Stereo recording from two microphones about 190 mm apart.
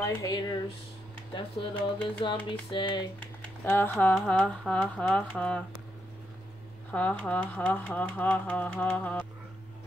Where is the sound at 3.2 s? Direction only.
10° left (ahead or behind).